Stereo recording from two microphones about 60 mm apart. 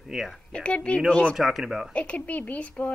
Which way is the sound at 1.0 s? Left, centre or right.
Centre.